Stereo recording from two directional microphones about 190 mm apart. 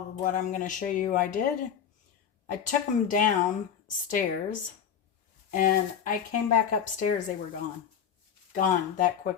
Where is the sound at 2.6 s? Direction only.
40° left (ahead or behind).